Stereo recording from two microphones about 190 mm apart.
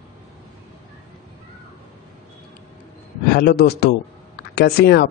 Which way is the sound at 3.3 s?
55° left (ahead or behind).